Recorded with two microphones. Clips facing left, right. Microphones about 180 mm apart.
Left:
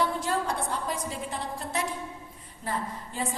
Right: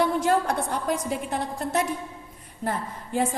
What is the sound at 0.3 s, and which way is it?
A woman's voice, 55° right (ahead or behind).